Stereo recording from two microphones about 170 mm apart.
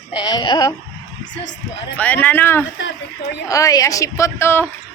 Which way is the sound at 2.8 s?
90° left.